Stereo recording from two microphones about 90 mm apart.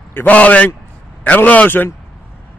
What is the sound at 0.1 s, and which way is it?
A man's voice, 20° left (ahead or behind).